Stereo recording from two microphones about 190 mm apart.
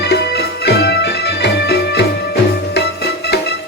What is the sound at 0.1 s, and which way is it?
Music, 60° left (ahead or behind).